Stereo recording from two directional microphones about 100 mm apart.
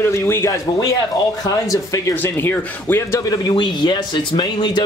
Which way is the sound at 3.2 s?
40° left (ahead or behind).